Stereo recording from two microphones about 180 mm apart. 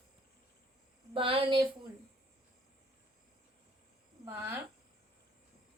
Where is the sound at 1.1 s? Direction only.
30° right (ahead or behind).